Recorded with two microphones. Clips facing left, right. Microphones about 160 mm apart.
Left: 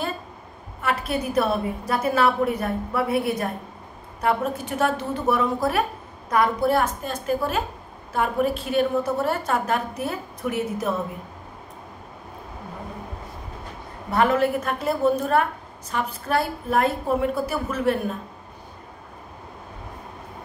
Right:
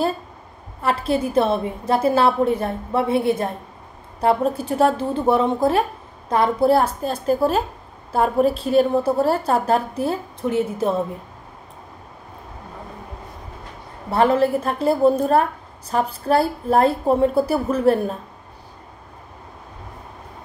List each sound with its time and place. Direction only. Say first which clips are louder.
0.7 s a woman's voice: right 5 dB; 30° right (ahead or behind)
14.1 s speech: right 3 dB; 30° right (ahead or behind)